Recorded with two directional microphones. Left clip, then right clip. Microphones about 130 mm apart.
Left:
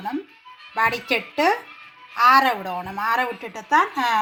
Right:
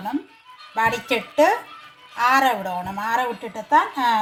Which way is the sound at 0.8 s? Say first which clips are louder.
Even; 15° left (ahead or behind).